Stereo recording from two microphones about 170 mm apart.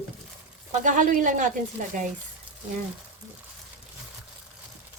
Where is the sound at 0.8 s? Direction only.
50° right (ahead or behind).